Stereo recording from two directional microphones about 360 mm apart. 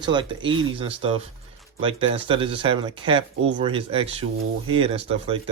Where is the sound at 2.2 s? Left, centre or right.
Centre.